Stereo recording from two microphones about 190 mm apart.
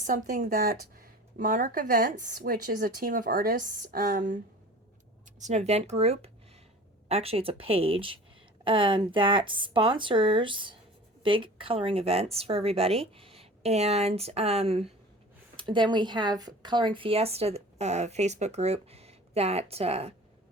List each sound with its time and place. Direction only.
0.0 s speech: 45° right (ahead or behind)
5.4 s a woman's voice: 35° right (ahead or behind)